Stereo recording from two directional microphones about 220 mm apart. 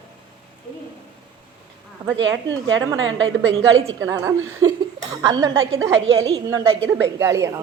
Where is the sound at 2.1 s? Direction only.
55° right (ahead or behind).